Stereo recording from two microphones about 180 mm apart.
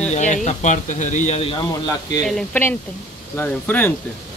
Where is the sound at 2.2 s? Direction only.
Centre (ahead or behind).